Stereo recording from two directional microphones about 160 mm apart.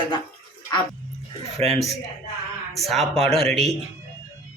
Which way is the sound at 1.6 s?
40° right (ahead or behind).